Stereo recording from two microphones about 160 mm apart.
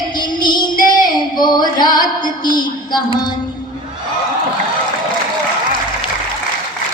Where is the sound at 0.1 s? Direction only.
25° left (ahead or behind).